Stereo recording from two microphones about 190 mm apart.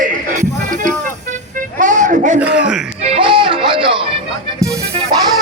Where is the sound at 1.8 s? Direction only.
40° right (ahead or behind).